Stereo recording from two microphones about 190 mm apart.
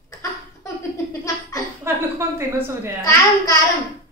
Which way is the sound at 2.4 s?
15° right (ahead or behind).